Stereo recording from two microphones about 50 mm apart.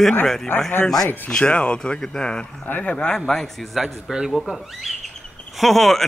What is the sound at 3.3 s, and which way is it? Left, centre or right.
Speech, centre.